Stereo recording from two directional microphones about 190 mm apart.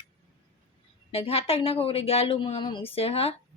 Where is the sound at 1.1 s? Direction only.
30° left (ahead or behind).